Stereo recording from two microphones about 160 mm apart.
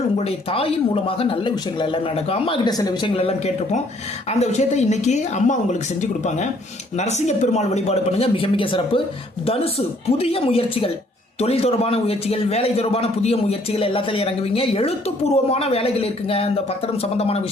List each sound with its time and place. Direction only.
0.3 s a man's voice: 35° left (ahead or behind)